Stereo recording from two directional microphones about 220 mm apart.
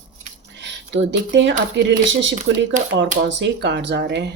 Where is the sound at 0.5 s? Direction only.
55° right (ahead or behind).